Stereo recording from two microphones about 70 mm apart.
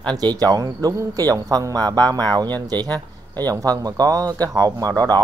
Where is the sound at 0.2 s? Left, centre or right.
Right.